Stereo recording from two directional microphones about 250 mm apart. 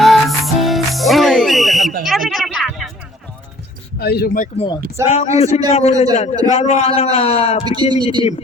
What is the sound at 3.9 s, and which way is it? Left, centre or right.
Speech, left.